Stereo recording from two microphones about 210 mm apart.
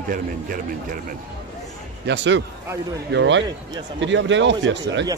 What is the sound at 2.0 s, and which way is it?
Speech, 60° right (ahead or behind).